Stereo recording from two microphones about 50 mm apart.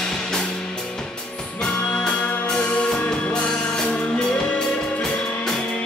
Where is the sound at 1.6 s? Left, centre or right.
Centre.